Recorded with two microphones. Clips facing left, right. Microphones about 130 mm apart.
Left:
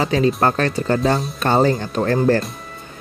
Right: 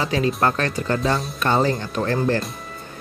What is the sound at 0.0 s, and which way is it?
Speech, 35° left (ahead or behind).